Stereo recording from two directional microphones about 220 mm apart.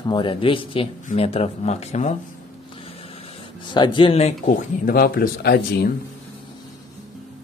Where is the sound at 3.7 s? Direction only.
20° left (ahead or behind); by 5.9 s 45° left (ahead or behind).